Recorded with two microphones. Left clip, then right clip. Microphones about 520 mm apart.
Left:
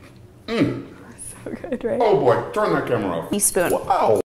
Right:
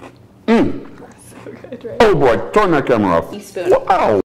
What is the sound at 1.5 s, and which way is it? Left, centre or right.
Speech, left.